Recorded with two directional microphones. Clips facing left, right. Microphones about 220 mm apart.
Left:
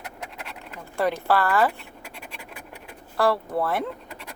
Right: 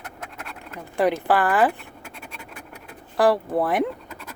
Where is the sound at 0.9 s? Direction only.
15° right (ahead or behind).